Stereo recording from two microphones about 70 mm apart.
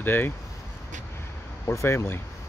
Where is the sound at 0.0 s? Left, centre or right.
Left.